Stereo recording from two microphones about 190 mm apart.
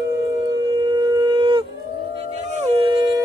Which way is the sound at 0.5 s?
25° right (ahead or behind).